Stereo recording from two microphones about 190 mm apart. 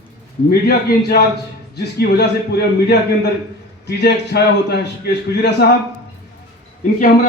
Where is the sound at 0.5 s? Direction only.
55° left (ahead or behind).